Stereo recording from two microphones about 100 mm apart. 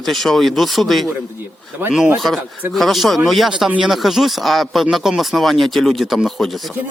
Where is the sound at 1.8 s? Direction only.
20° right (ahead or behind).